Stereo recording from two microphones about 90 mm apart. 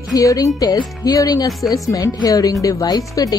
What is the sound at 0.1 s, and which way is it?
A woman's voice, 40° left (ahead or behind).